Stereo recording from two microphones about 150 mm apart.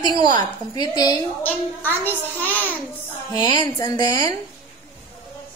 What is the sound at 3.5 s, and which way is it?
Speech, 25° left (ahead or behind).